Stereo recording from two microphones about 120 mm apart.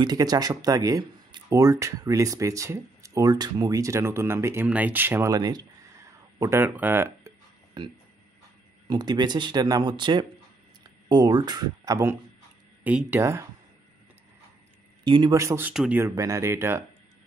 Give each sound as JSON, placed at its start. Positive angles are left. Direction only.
{"t": 0.0, "sound": "speech", "side_deg": -35}
{"t": 5.3, "sound": "speech", "side_deg": -35}
{"t": 6.4, "sound": "speech", "side_deg": -20}
{"t": 7.8, "sound": "speech", "side_deg": -35}
{"t": 12.8, "sound": "speech", "side_deg": -15}
{"t": 13.2, "sound": "speech", "side_deg": -25}
{"t": 15.0, "sound": "speech", "side_deg": -40}
{"t": 15.3, "sound": "speech", "side_deg": -20}
{"t": 15.7, "sound": "speech", "side_deg": -5}
{"t": 16.0, "sound": "speech", "side_deg": -25}